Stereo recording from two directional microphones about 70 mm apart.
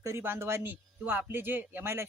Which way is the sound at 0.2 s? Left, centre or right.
Right.